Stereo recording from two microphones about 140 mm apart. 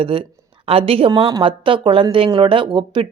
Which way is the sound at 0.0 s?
40° right (ahead or behind).